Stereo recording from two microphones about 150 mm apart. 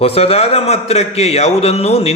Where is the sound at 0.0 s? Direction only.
40° left (ahead or behind).